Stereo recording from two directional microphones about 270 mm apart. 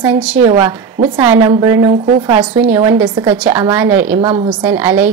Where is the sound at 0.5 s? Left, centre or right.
Right.